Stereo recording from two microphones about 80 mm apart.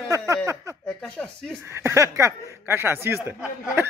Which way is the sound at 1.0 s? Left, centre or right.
Centre.